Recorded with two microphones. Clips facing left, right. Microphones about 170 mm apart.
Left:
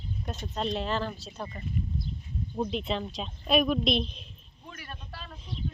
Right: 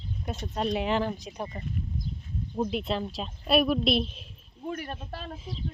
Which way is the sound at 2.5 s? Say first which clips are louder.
Right 2 dB; 5° right (ahead or behind).